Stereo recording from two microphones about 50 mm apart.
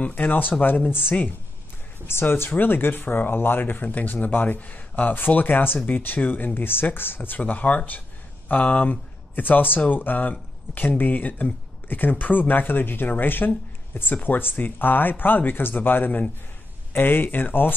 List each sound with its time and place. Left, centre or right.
0.0 s speech: left
2.0 s speech: left